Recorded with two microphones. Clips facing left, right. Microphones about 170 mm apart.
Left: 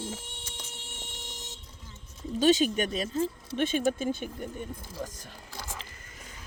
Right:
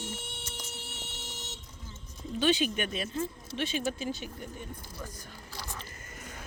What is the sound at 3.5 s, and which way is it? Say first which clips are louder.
Speech: left 6 dB; 50° left (ahead or behind).